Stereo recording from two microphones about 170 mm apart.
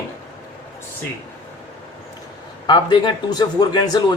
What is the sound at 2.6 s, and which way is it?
Speech, 25° left (ahead or behind).